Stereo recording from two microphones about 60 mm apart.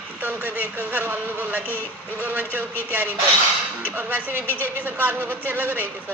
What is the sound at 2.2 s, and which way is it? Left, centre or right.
Speech, right.